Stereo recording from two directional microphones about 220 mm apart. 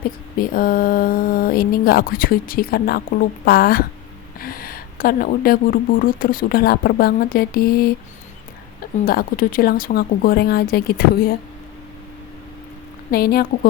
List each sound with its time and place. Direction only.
0.3 s speech: 40° left (ahead or behind)
9.0 s speech: 40° left (ahead or behind)
13.1 s speech: 45° left (ahead or behind)